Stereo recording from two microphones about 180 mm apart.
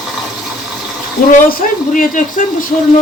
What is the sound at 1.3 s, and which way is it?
Speech, 50° left (ahead or behind).